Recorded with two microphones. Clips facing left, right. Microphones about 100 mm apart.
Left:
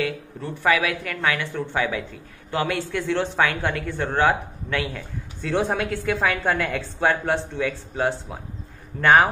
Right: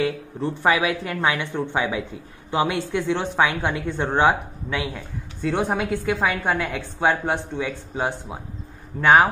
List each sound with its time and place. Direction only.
0.0 s a man's voice: 25° right (ahead or behind); by 9.3 s 5° right (ahead or behind)